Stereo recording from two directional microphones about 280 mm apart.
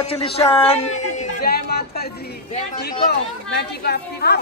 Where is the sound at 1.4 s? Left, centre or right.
Left.